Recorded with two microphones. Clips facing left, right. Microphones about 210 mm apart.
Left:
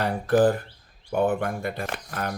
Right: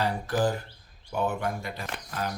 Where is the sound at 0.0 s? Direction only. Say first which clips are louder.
Left 6 dB; 55° left (ahead or behind).